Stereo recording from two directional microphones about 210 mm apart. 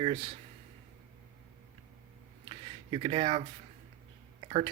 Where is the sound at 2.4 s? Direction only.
25° right (ahead or behind).